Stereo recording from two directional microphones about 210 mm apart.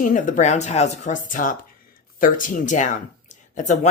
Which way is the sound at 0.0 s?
40° left (ahead or behind).